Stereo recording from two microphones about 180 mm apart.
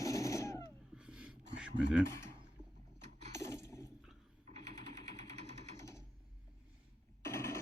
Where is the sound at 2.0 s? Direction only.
15° left (ahead or behind).